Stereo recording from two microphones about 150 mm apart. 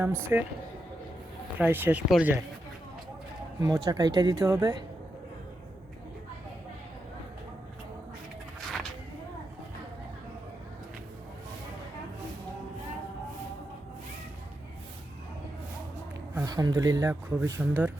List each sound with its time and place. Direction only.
0.0 s speech: 15° right (ahead or behind)
1.5 s speech: 15° right (ahead or behind)
3.6 s speech: 25° right (ahead or behind)
8.6 s a sound: centre (ahead or behind)
16.3 s speech: 25° right (ahead or behind)